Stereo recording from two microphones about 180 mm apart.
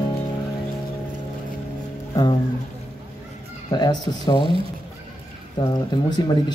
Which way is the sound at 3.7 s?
25° left (ahead or behind).